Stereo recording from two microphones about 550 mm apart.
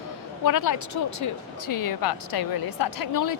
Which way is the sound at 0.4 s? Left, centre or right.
Left.